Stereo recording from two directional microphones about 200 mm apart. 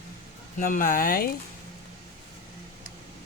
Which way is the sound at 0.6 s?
45° left (ahead or behind).